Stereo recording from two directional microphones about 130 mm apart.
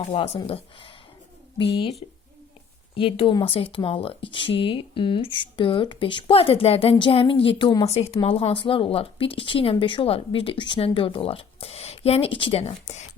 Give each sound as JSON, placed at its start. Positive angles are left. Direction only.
{"t": 0.1, "sound": "speech", "side_deg": 55}
{"t": 7.9, "sound": "speech", "side_deg": 55}